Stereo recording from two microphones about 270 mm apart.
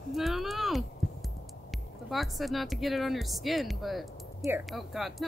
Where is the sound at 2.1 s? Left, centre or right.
Centre.